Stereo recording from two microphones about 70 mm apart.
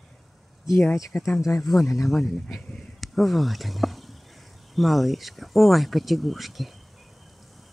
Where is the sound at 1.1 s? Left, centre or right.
Centre.